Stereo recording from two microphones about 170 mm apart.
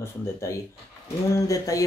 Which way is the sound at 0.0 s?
15° left (ahead or behind).